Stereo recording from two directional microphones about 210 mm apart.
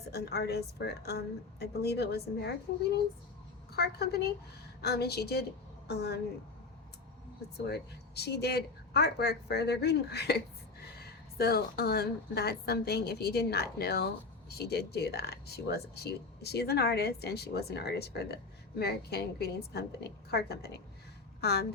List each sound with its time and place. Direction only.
0.1 s speech: 50° left (ahead or behind)
3.8 s speech: 50° left (ahead or behind)
7.5 s speech: 50° left (ahead or behind)